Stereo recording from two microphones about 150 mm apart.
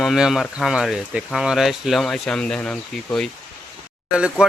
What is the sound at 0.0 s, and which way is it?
Speech, centre (ahead or behind).